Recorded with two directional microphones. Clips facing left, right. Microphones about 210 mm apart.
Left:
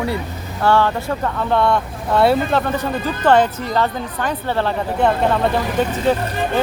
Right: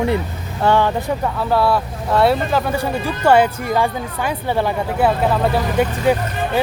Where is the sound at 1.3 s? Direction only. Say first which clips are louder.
Even; 5° right (ahead or behind).